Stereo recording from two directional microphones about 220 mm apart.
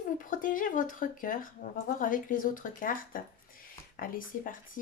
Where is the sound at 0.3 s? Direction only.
35° left (ahead or behind).